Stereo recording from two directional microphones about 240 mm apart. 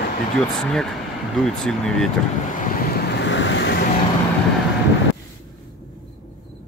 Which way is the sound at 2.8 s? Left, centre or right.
Left.